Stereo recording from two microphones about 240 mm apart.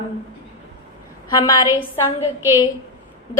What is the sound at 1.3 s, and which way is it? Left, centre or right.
Speech, centre.